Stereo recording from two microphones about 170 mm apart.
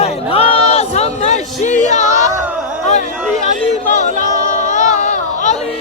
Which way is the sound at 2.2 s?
10° right (ahead or behind).